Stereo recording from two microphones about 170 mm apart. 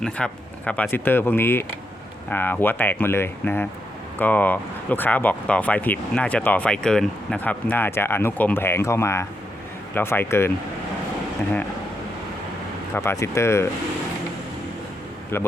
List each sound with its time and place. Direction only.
0.0 s speech: 5° left (ahead or behind)
12.9 s speech: 15° left (ahead or behind)